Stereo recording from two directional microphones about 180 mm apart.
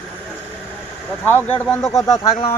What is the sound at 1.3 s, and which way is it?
Speech, 10° left (ahead or behind).